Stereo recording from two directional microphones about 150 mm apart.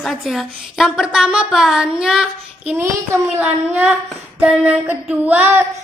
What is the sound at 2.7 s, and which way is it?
A woman's voice, 15° right (ahead or behind).